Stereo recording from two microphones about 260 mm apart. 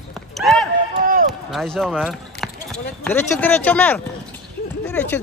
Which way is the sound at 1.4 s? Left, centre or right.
Centre.